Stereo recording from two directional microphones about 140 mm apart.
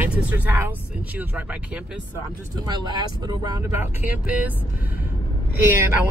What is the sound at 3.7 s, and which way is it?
Speech, 15° right (ahead or behind).